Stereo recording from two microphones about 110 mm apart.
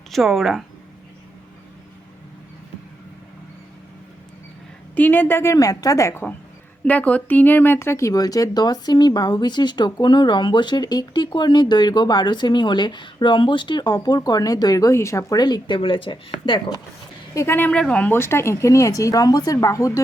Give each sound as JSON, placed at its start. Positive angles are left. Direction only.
{"t": 0.1, "sound": "a woman's voice", "side_deg": 0}
{"t": 4.9, "sound": "speech", "side_deg": 15}
{"t": 6.8, "sound": "speech", "side_deg": 15}
{"t": 16.5, "sound": "speech", "side_deg": 40}
{"t": 17.3, "sound": "speech", "side_deg": 20}
{"t": 17.7, "sound": "speech", "side_deg": 10}